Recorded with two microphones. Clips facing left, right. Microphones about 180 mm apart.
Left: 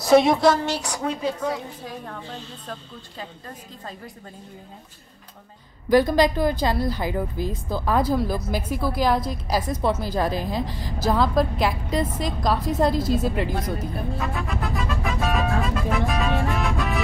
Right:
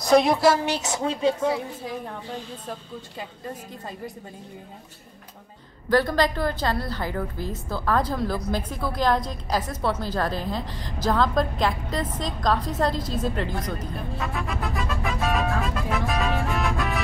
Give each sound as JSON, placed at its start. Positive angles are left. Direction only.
{"t": 0.0, "sound": "speech", "side_deg": 0}
{"t": 0.7, "sound": "a woman's voice", "side_deg": -20}
{"t": 5.9, "sound": "a woman's voice", "side_deg": 15}